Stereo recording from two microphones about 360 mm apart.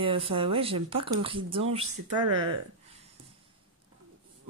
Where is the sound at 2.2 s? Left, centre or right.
Right.